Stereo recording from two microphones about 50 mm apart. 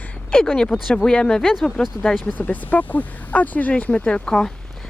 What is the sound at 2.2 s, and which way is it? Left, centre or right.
Speech, left.